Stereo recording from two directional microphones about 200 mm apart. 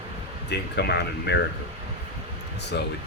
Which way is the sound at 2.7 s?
60° left (ahead or behind).